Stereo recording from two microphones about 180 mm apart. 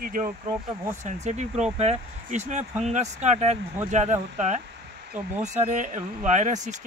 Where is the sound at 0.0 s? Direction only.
50° right (ahead or behind).